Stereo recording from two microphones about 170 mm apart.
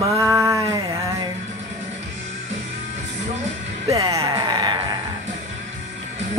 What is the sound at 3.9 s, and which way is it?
Music, 20° right (ahead or behind).